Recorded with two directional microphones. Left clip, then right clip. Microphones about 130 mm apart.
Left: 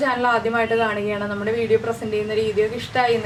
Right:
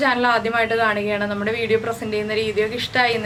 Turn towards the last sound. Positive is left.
turn(degrees=-20)  # may be behind; listen again after turning